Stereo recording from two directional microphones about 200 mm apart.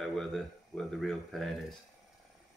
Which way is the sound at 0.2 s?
Centre (ahead or behind).